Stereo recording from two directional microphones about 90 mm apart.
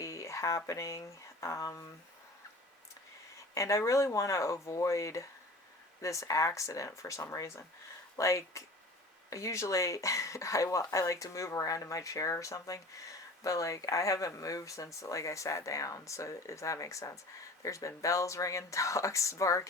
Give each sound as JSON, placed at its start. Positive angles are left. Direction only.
{"t": 0.0, "sound": "speech", "side_deg": 35}
{"t": 3.5, "sound": "speech", "side_deg": 35}